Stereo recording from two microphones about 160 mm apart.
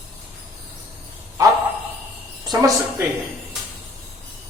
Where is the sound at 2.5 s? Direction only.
25° right (ahead or behind).